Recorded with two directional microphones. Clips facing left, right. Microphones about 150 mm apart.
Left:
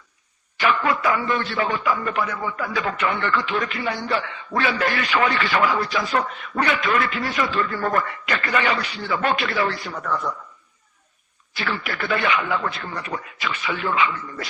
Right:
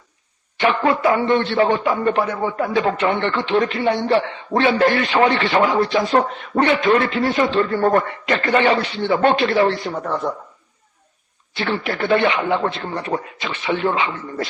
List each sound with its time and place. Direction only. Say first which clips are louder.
0.6 s a man's voice: right 4 dB; 30° right (ahead or behind)
11.5 s a man's voice: right 5 dB; 30° right (ahead or behind)